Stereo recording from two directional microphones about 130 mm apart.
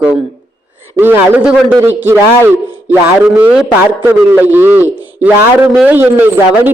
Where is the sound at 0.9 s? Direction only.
15° right (ahead or behind).